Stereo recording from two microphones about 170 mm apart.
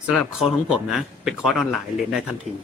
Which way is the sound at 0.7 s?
Centre (ahead or behind).